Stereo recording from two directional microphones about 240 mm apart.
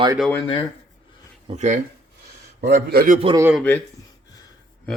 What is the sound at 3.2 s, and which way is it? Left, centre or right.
Speech, centre.